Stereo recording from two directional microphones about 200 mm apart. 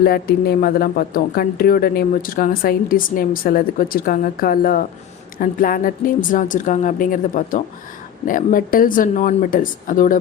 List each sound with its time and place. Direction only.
0.0 s speech: 50° left (ahead or behind)